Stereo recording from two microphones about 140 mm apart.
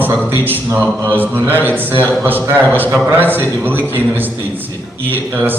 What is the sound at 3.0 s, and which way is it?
Speech, 15° right (ahead or behind).